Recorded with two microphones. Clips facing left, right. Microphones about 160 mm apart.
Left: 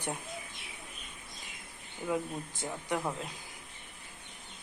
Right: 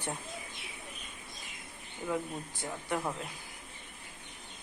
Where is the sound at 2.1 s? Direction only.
20° left (ahead or behind).